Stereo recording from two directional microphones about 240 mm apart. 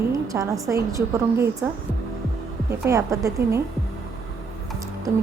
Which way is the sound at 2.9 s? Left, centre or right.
Centre.